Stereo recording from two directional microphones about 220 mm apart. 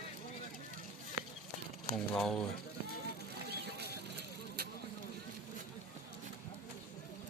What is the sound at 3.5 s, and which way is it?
Vehicle, 45° right (ahead or behind).